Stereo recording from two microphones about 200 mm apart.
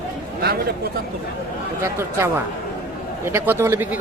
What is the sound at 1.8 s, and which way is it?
Speech, 15° right (ahead or behind).